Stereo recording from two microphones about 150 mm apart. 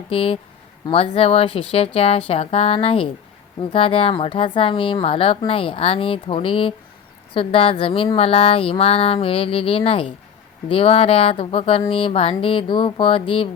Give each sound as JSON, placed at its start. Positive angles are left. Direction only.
{"t": 0.1, "sound": "speech", "side_deg": 35}